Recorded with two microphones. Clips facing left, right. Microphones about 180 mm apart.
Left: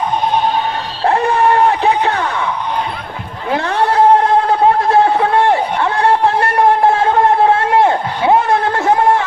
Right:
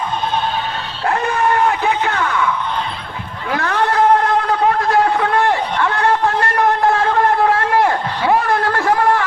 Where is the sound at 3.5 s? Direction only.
25° left (ahead or behind).